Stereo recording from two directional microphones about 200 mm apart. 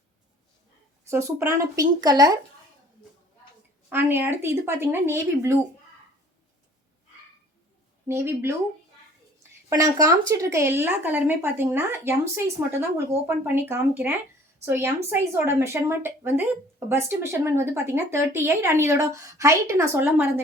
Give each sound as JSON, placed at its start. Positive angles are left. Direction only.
{"t": 1.1, "sound": "a woman's voice", "side_deg": -15}
{"t": 3.8, "sound": "a woman's voice", "side_deg": -10}
{"t": 8.0, "sound": "a woman's voice", "side_deg": -10}
{"t": 9.6, "sound": "a woman's voice", "side_deg": -15}